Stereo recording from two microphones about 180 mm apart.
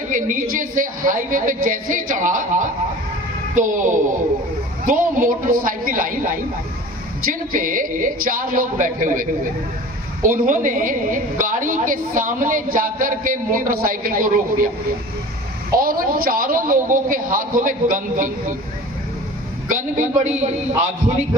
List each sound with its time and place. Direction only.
0.1 s a woman's voice: 45° right (ahead or behind)
15.7 s a woman's voice: 55° right (ahead or behind)
19.7 s a woman's voice: 45° right (ahead or behind)